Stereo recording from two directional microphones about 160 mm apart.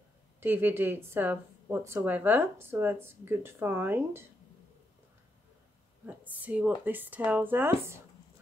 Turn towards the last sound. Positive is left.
turn(degrees=-15)  # may be behind; listen again after turning